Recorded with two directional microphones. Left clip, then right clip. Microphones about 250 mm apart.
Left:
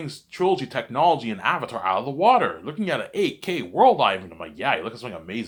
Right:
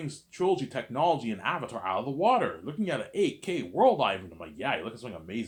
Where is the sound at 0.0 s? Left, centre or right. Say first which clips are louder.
Left 6 dB; centre.